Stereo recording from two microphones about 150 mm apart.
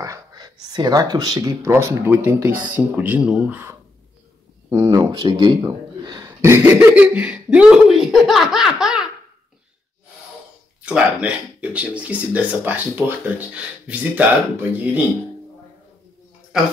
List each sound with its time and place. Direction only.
0.0 s speech: 25° right (ahead or behind)
4.6 s speech: 25° right (ahead or behind); by 9.1 s 5° right (ahead or behind)
10.9 s speech: 5° right (ahead or behind)